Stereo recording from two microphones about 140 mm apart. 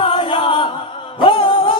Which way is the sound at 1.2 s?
35° left (ahead or behind).